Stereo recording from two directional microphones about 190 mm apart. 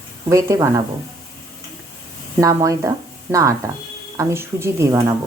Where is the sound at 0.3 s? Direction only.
15° right (ahead or behind).